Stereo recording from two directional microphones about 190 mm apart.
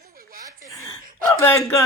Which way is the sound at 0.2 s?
50° right (ahead or behind).